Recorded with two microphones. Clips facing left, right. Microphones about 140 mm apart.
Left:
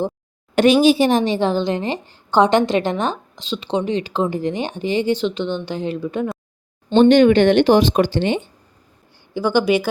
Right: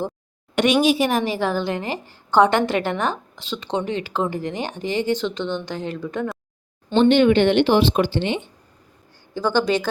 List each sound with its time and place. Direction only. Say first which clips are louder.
0.5 s a woman's voice: left 5 dB; 30° left (ahead or behind); by 6.2 s 15° left (ahead or behind)
7.0 s speech: left 3 dB; 45° left (ahead or behind)
9.3 s speech: left 3 dB; 15° left (ahead or behind)